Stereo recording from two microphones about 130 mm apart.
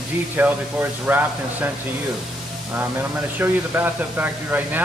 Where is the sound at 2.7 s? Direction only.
15° right (ahead or behind).